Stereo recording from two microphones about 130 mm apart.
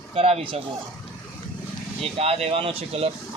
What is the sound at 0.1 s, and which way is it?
Speech, 50° right (ahead or behind).